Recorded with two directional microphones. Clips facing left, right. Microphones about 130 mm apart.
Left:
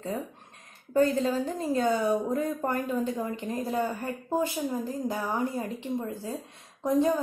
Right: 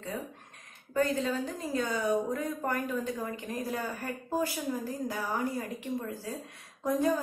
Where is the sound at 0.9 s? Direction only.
30° left (ahead or behind).